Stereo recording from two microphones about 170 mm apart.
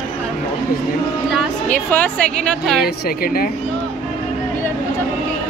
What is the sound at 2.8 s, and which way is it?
Speech, 60° left (ahead or behind).